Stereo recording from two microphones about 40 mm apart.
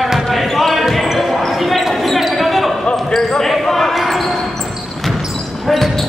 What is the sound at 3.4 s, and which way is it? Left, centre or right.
Basketball bounce, centre.